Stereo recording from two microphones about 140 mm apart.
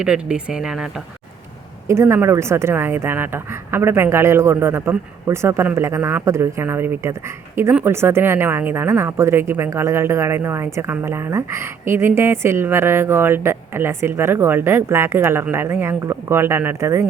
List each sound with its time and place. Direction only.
0.0 s speech: 5° right (ahead or behind)
1.9 s speech: 20° right (ahead or behind)